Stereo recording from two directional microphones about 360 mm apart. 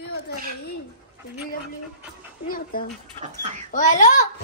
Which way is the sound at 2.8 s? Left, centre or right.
Left.